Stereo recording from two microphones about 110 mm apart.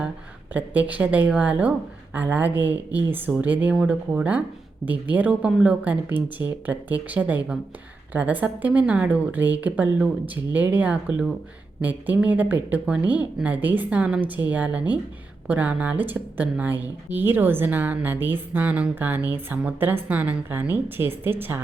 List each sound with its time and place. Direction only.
0.5 s a woman's voice: 15° right (ahead or behind)